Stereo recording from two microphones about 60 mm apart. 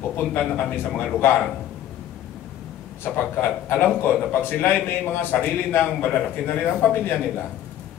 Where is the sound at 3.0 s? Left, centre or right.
Left.